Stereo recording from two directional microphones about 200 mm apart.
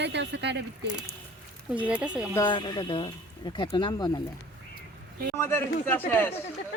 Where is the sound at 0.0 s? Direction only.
60° right (ahead or behind).